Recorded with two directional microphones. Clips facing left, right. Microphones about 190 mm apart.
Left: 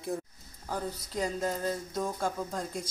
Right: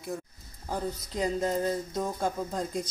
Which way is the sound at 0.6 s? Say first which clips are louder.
Right 2 dB; 20° right (ahead or behind).